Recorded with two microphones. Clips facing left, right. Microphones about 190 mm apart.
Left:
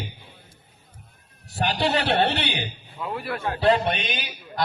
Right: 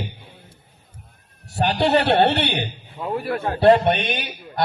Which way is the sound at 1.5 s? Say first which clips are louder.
Right 5 dB; 60° right (ahead or behind).